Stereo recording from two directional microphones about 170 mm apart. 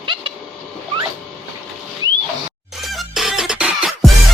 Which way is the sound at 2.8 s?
Centre (ahead or behind).